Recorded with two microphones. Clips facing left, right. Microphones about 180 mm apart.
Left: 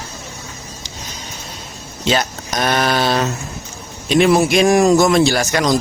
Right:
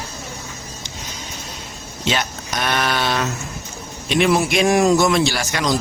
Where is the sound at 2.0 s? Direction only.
40° left (ahead or behind).